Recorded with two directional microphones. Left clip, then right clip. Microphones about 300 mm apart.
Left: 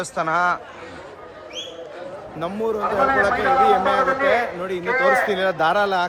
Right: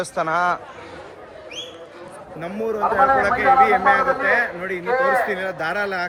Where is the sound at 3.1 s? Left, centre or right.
Centre.